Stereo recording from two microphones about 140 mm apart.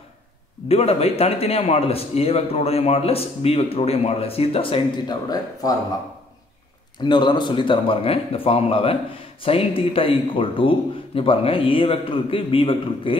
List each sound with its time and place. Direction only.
0.7 s a man's voice: 45° left (ahead or behind); by 5.8 s 25° left (ahead or behind)
7.0 s a man's voice: 30° left (ahead or behind)